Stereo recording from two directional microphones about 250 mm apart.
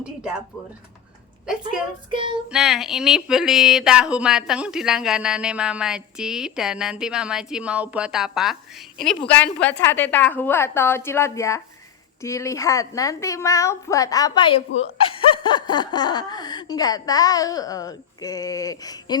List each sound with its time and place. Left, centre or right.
0.0 s speech: centre
2.0 s child singing: centre
2.5 s speech: centre